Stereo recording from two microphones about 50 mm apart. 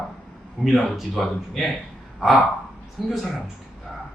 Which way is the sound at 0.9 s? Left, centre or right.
Centre.